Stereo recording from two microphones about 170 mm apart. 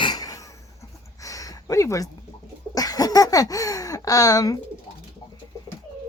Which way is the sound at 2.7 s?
20° left (ahead or behind).